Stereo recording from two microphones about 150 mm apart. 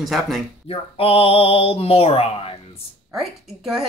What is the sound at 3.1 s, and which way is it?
Speech, centre (ahead or behind).